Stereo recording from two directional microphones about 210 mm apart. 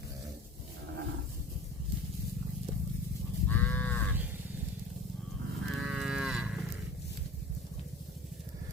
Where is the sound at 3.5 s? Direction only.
10° left (ahead or behind).